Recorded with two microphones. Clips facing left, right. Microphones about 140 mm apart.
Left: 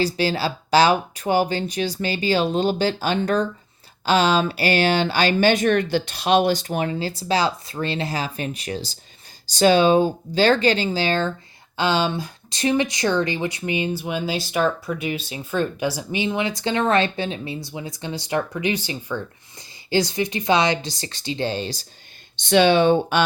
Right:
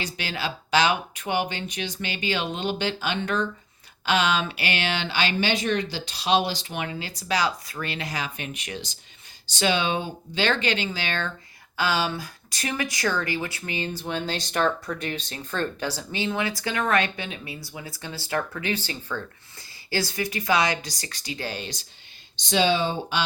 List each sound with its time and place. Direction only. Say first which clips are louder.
0.0 s speech: left 9 dB; 35° left (ahead or behind)
22.4 s speech: left 7 dB; 60° left (ahead or behind)